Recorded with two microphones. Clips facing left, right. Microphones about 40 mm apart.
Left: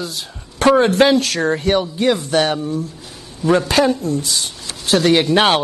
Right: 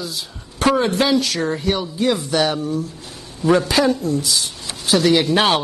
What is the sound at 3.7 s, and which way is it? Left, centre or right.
Speech, left.